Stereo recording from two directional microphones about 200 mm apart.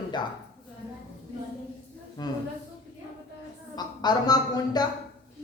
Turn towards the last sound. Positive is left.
turn(degrees=20)  # may be behind; listen again after turning